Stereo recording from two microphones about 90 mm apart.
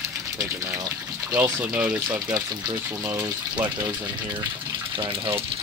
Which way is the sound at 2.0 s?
50° right (ahead or behind).